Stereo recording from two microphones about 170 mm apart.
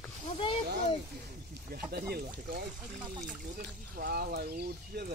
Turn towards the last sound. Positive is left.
turn(degrees=-65)  # may be behind; listen again after turning